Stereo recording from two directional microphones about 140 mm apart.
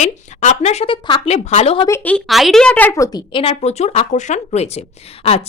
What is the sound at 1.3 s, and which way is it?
Speech, 50° left (ahead or behind).